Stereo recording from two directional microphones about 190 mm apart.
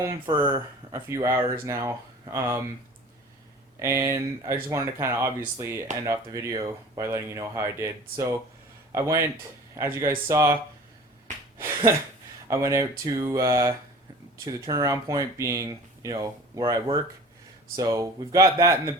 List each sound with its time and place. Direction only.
0.0 s speech: 15° right (ahead or behind)
3.8 s speech: 15° right (ahead or behind)
12.5 s speech: 15° right (ahead or behind)